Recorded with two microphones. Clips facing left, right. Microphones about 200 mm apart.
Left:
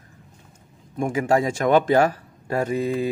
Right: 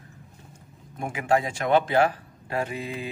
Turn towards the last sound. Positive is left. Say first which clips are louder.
# left 8 dB
turn(degrees=40)  # may be behind; listen again after turning